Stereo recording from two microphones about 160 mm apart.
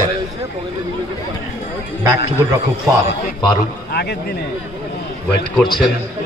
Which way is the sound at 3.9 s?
90° left.